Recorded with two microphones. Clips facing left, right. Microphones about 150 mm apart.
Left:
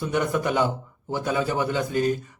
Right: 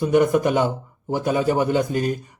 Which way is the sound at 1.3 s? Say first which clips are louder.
Right 5 dB; 45° right (ahead or behind).